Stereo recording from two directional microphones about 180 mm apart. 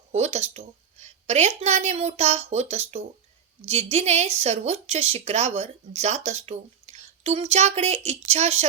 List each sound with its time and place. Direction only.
0.1 s speech: 35° right (ahead or behind)